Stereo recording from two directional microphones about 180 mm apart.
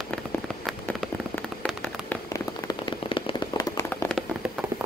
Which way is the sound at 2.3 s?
25° left (ahead or behind).